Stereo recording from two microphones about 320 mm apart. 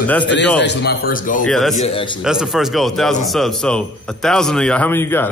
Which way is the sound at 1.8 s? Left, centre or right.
Centre.